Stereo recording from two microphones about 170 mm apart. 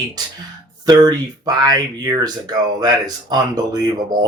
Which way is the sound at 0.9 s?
25° right (ahead or behind).